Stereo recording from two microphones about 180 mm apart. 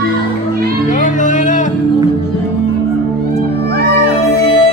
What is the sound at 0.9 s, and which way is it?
Music, 45° left (ahead or behind).